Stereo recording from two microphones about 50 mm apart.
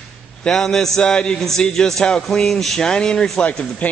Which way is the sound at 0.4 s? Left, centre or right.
Centre.